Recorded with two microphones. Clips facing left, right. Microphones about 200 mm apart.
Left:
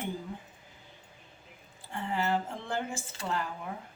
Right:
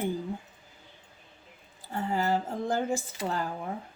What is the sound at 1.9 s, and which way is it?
Speech, 40° right (ahead or behind).